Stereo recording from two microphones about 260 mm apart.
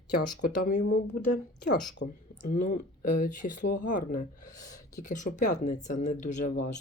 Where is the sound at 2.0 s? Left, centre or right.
Left.